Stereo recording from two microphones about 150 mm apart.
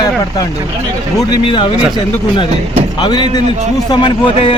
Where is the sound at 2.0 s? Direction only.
30° left (ahead or behind).